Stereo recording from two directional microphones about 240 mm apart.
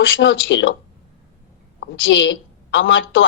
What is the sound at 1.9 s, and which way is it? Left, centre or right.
A woman's voice, left.